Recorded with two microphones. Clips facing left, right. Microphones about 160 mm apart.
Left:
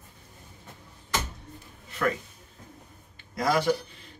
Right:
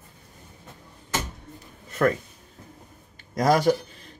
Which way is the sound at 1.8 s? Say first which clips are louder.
Right 6 dB; 45° right (ahead or behind).